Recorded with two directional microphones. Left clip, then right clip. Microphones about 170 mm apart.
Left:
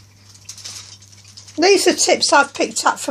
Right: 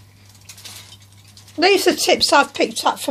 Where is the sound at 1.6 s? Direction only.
20° left (ahead or behind).